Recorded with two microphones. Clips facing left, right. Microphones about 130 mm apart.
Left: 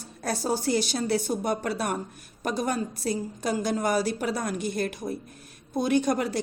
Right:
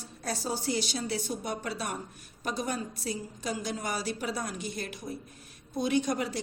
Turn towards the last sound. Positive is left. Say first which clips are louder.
# left 5 dB
turn(degrees=50)  # may be behind; listen again after turning